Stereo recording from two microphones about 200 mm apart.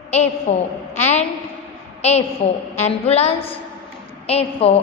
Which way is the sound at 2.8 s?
30° left (ahead or behind).